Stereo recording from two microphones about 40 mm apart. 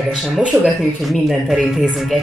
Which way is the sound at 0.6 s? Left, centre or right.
Centre.